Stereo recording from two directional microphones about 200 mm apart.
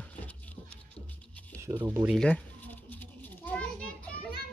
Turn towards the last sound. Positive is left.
turn(degrees=5)  # may be behind; listen again after turning